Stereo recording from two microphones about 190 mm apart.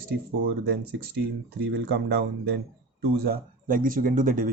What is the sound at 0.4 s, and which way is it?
Speech, 60° right (ahead or behind).